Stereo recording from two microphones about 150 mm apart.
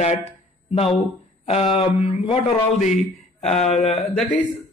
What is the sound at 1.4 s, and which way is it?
Speech, 40° left (ahead or behind).